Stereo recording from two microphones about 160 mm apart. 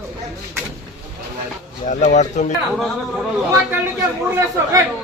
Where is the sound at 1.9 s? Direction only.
50° left (ahead or behind).